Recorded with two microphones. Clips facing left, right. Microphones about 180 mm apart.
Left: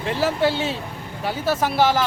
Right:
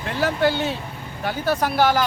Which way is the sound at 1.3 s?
5° left (ahead or behind).